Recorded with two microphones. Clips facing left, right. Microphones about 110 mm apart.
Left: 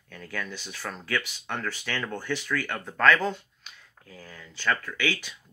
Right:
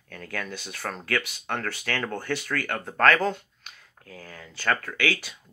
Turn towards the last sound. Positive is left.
turn(degrees=-45)  # may be behind; listen again after turning